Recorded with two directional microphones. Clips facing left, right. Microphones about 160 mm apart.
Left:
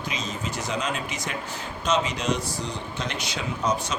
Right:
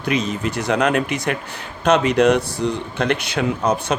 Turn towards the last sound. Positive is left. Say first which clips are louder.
# right 7 dB
turn(degrees=-60)  # may be behind; listen again after turning